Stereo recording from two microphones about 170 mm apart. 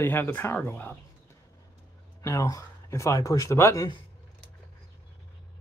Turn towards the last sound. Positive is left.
turn(degrees=20)  # may be behind; listen again after turning